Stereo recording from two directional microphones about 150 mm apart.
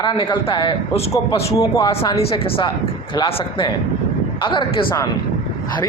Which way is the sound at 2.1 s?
40° left (ahead or behind).